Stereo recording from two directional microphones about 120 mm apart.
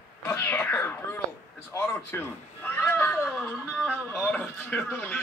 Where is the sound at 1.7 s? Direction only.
20° left (ahead or behind).